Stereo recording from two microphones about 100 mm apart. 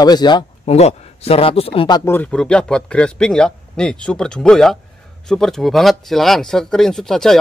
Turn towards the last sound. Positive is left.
turn(degrees=5)  # may be behind; listen again after turning